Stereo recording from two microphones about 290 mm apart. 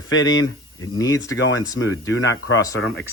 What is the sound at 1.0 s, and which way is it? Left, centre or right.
Speech, centre.